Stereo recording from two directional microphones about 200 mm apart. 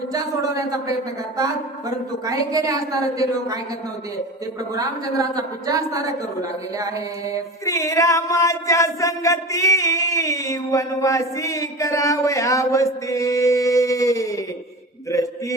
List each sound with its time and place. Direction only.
0.1 s a woman's voice: 15° right (ahead or behind)
2.2 s a woman's voice: 15° right (ahead or behind)
4.8 s a woman's voice: 20° right (ahead or behind)
7.6 s a sound: 15° left (ahead or behind)